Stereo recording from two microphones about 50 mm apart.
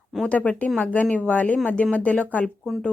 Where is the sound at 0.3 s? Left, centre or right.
Left.